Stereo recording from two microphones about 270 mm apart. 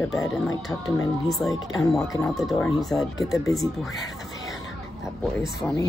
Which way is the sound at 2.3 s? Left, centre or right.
Centre.